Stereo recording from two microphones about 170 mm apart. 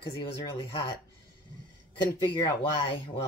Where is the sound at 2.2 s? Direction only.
30° left (ahead or behind).